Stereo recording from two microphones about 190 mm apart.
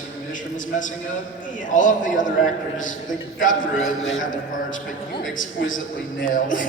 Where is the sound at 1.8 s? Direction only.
45° left (ahead or behind).